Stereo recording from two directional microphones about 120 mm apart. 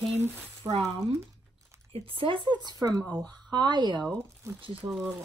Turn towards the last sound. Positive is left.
turn(degrees=-15)  # may be behind; listen again after turning